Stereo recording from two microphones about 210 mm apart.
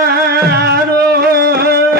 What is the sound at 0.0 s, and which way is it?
Music, 50° right (ahead or behind).